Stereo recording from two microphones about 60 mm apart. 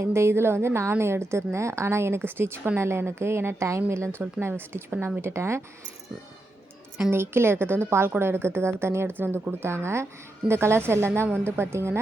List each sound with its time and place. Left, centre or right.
0.0 s a woman's voice: right
7.1 s a woman's voice: right